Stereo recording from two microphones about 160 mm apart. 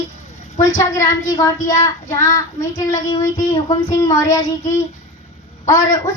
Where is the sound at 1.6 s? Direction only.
50° left (ahead or behind).